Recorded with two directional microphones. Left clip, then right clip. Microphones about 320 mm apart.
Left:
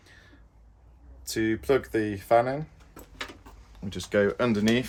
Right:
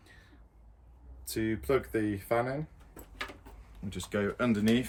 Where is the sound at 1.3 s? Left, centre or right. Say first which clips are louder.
Left 5 dB; centre.